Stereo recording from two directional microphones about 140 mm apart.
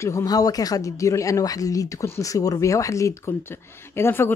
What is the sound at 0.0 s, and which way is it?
Speech, 25° left (ahead or behind).